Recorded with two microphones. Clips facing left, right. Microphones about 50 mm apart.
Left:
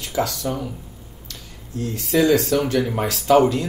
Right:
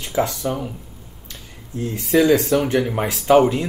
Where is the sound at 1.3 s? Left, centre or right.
Right.